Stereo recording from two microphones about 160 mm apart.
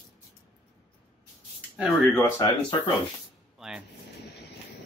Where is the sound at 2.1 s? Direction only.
20° left (ahead or behind).